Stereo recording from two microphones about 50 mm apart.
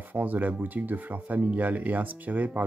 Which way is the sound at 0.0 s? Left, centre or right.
Right.